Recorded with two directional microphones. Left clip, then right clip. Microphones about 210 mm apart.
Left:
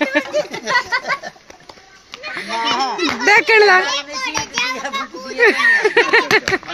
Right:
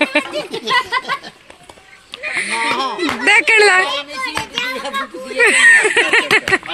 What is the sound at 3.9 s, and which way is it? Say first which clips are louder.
Speech: even; 40° left (ahead or behind).